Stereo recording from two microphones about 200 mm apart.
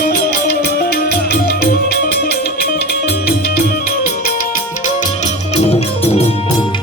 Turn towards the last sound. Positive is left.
turn(degrees=30)  # may be behind; listen again after turning